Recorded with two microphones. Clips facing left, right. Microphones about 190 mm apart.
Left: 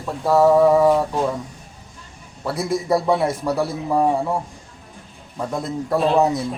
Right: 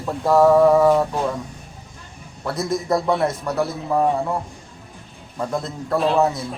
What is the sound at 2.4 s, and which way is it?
A man's voice, 10° left (ahead or behind).